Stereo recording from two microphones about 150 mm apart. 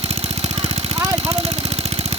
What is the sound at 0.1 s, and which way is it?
Engine, 45° right (ahead or behind).